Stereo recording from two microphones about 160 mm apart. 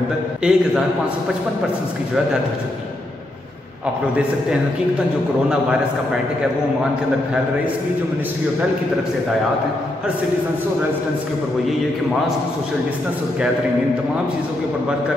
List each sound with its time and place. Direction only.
0.4 s a man's voice: 5° right (ahead or behind)